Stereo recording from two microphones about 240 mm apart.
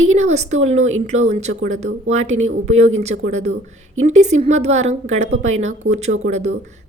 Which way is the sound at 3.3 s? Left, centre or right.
Right.